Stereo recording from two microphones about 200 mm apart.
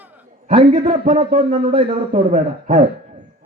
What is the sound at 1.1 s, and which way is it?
A man's voice, 35° right (ahead or behind).